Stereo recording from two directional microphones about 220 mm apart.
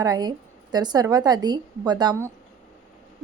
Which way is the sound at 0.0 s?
20° right (ahead or behind).